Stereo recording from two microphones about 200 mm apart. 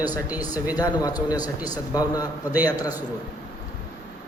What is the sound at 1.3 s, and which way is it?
Speech, 20° left (ahead or behind).